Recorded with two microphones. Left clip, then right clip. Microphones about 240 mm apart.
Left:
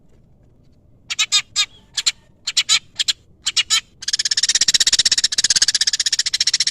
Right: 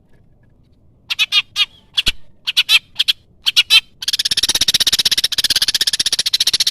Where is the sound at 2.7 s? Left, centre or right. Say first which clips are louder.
Right 6 dB; centre.